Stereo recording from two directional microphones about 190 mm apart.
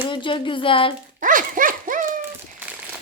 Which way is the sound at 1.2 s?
45° right (ahead or behind).